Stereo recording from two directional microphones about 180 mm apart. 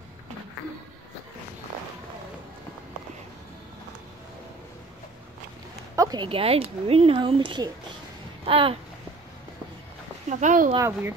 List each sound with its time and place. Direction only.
5.9 s speech: 20° right (ahead or behind)
10.4 s speech: 45° right (ahead or behind)
10.8 s a child's voice: 15° right (ahead or behind)